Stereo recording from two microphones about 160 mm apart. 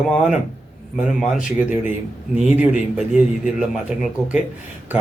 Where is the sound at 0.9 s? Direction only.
Centre (ahead or behind).